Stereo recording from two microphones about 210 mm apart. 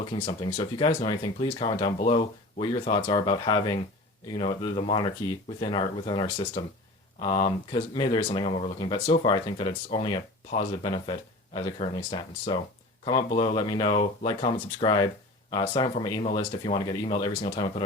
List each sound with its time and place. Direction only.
0.0 s speech: 20° left (ahead or behind)